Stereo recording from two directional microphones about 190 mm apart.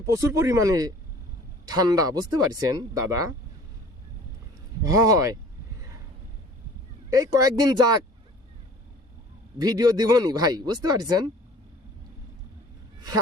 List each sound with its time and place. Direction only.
0.1 s speech: 15° right (ahead or behind)
4.8 s speech: 15° right (ahead or behind)
7.1 s speech: 20° right (ahead or behind)
9.6 s speech: 20° right (ahead or behind)